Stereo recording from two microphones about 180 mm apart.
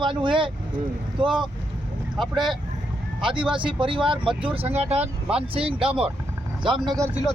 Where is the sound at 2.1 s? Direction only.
Centre (ahead or behind).